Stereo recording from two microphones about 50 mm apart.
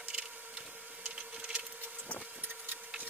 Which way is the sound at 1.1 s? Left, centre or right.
Right.